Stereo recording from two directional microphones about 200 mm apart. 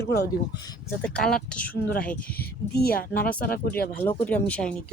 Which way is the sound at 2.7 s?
50° left (ahead or behind).